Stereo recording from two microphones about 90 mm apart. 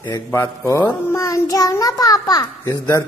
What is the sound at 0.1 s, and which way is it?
Child singing, 35° left (ahead or behind).